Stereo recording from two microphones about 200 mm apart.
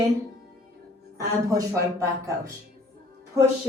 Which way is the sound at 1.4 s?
15° right (ahead or behind).